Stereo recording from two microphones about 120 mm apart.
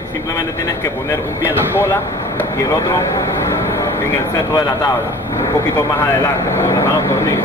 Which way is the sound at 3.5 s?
20° left (ahead or behind).